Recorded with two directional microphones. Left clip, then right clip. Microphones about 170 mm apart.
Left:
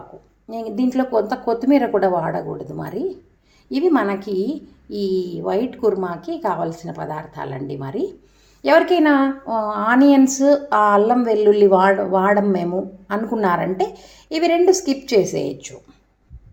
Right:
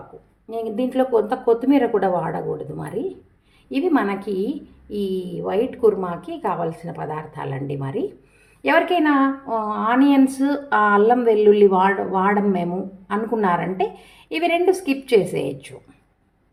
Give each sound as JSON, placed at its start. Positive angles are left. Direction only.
{"t": 0.5, "sound": "a woman's voice", "side_deg": 15}
{"t": 4.9, "sound": "a woman's voice", "side_deg": -10}
{"t": 5.5, "sound": "a woman's voice", "side_deg": 15}